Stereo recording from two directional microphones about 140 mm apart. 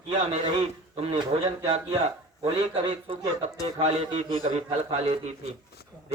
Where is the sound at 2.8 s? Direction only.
45° right (ahead or behind).